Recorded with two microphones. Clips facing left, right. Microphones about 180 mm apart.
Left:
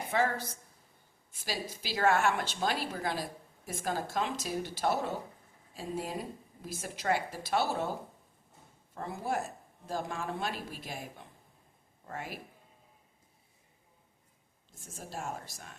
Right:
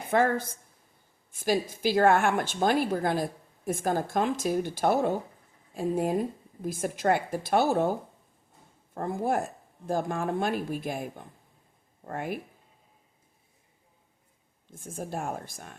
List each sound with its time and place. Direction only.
0.1 s a woman's voice: 50° right (ahead or behind)
9.0 s a woman's voice: 50° right (ahead or behind)
14.7 s a woman's voice: 55° right (ahead or behind)